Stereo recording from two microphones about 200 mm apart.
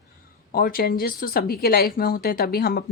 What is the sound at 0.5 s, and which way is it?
Speech, 45° left (ahead or behind).